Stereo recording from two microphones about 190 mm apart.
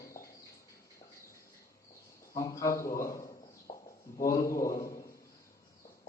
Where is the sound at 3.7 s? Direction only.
25° left (ahead or behind).